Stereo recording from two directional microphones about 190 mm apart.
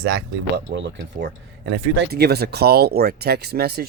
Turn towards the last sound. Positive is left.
turn(degrees=-55)  # may be behind; listen again after turning